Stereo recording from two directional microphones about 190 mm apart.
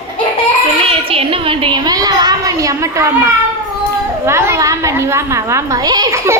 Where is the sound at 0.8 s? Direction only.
30° right (ahead or behind).